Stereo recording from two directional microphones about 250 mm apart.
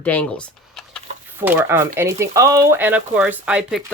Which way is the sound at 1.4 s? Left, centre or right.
Centre.